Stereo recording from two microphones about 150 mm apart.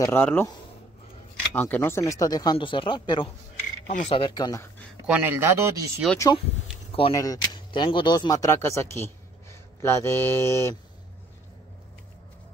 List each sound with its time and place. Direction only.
0.0 s speech: 15° left (ahead or behind)
1.5 s speech: 10° left (ahead or behind); by 3.3 s 35° left (ahead or behind)
3.8 s speech: 45° left (ahead or behind); by 4.6 s 25° left (ahead or behind)
5.0 s speech: 10° right (ahead or behind)
6.9 s keys jangling: 35° left (ahead or behind)
7.2 s speech: 25° left (ahead or behind)